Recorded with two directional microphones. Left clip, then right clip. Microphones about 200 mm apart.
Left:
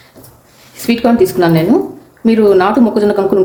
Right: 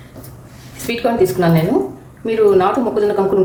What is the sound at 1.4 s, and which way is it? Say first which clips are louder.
A woman's voice: left 4 dB; 40° left (ahead or behind).